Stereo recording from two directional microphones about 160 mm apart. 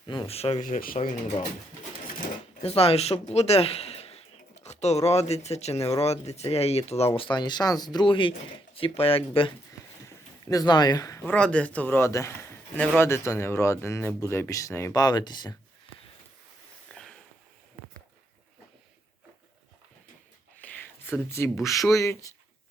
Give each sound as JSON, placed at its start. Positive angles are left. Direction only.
{"t": 0.3, "sound": "speech", "side_deg": 40}
{"t": 0.6, "sound": "speech", "side_deg": 60}
{"t": 0.9, "sound": "speech", "side_deg": 45}
{"t": 2.6, "sound": "speech", "side_deg": 40}
{"t": 7.2, "sound": "speech", "side_deg": 30}
{"t": 10.5, "sound": "speech", "side_deg": 25}
{"t": 11.3, "sound": "a man's voice", "side_deg": 5}
{"t": 16.9, "sound": "a sound", "side_deg": 5}
{"t": 20.6, "sound": "a sound", "side_deg": 15}
{"t": 21.6, "sound": "speech", "side_deg": 20}